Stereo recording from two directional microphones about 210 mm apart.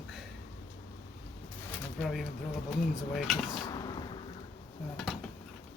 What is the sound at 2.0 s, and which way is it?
Speech, centre (ahead or behind).